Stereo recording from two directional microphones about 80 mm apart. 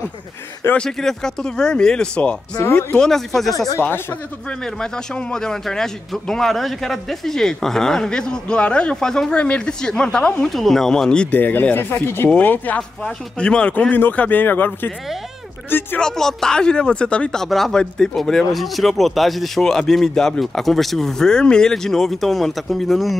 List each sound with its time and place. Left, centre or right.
0.7 s speech: centre
2.6 s speech: left
3.0 s speech: centre
3.5 s speech: left
4.5 s speech: centre
16.0 s speech: centre